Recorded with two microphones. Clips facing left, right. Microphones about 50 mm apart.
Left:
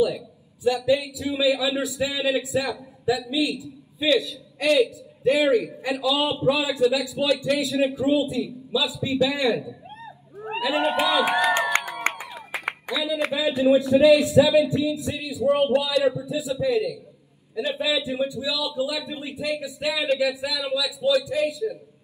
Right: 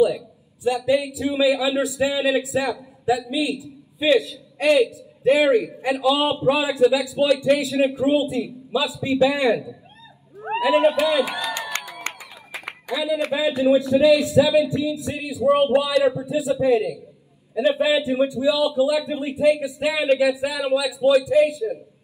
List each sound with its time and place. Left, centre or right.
0.7 s a man's voice: right
10.9 s speech: left
12.1 s clapping: left
12.9 s a man's voice: right
14.4 s speech: right
15.0 s a man's voice: right